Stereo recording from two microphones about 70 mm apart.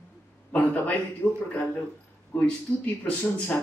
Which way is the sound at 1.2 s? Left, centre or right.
Left.